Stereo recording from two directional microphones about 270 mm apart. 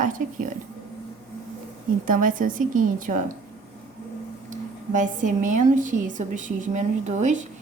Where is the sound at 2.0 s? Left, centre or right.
Right.